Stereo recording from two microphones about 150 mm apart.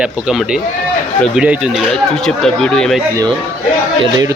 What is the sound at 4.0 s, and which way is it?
Speech, 25° right (ahead or behind).